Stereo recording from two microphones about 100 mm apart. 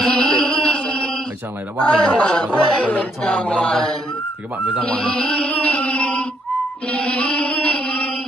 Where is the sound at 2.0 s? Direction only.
10° left (ahead or behind).